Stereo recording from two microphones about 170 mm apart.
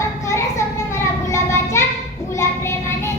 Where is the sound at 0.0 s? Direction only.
15° left (ahead or behind).